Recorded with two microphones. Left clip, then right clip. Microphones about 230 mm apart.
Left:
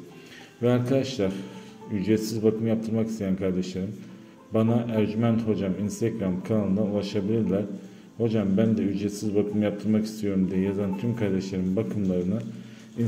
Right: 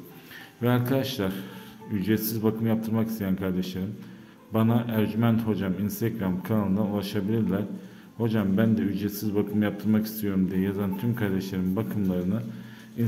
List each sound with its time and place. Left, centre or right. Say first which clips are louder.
0.6 s a man's voice: left 2 dB; centre